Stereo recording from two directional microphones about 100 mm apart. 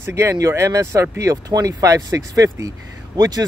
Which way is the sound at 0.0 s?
30° right (ahead or behind).